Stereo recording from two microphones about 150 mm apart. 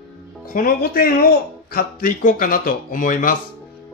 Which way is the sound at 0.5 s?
75° left (ahead or behind).